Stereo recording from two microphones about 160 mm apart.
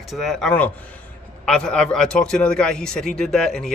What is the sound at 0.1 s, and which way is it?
Speech, centre (ahead or behind).